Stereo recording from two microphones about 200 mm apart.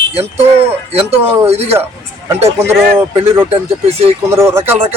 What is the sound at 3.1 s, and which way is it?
Speech, 15° right (ahead or behind).